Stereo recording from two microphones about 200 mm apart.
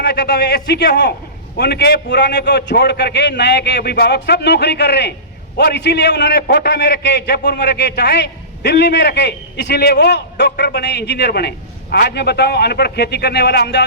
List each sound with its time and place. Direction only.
0.0 s a man's voice: 55° left (ahead or behind)